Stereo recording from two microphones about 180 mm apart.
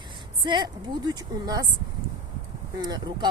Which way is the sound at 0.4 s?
25° right (ahead or behind).